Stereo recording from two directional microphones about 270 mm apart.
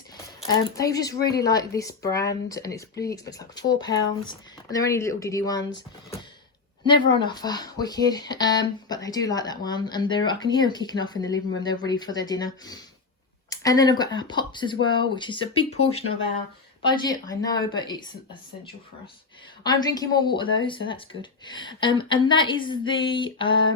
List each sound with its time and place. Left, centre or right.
0.8 s speech: centre
19.6 s speech: centre